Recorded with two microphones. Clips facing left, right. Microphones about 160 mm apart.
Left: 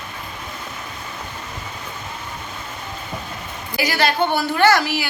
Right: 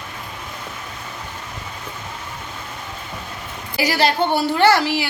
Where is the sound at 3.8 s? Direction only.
35° right (ahead or behind).